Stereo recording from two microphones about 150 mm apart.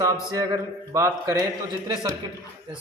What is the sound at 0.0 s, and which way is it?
A man's voice, 20° right (ahead or behind).